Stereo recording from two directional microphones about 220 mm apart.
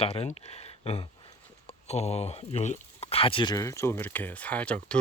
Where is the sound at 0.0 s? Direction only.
30° left (ahead or behind).